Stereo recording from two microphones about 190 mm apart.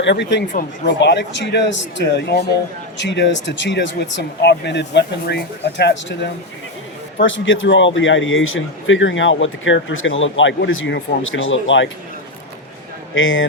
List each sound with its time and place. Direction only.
0.0 s speech: 70° left (ahead or behind)
7.2 s a man's voice: 80° left
13.1 s a man's voice: 90° left